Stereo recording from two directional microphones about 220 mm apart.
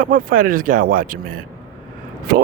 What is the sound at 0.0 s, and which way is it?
Speech, 40° right (ahead or behind).